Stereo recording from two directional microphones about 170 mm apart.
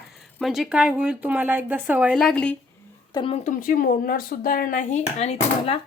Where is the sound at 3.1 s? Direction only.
30° left (ahead or behind).